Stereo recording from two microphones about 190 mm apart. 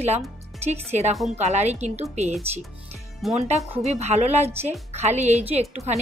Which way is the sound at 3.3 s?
35° right (ahead or behind).